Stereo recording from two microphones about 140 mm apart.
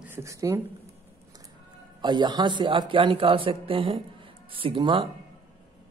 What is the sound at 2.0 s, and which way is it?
A man's voice, 30° right (ahead or behind).